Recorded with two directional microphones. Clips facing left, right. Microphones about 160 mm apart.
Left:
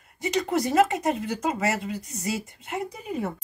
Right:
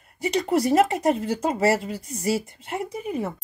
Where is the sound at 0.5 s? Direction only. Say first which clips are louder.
Right 2 dB; 35° right (ahead or behind).